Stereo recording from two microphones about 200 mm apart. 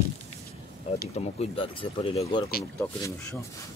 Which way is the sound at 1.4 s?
25° left (ahead or behind).